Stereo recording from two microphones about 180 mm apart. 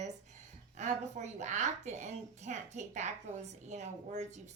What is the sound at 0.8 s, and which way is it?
A woman's voice, 40° right (ahead or behind).